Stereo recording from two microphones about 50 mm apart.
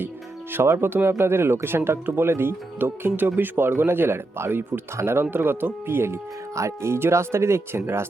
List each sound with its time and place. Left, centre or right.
0.8 s speech: right
5.2 s speech: right
6.6 s speech: right